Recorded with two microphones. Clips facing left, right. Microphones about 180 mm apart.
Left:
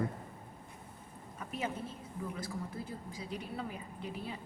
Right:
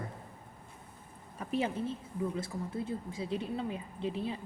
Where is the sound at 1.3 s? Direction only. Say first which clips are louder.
Right 6 dB; 30° right (ahead or behind).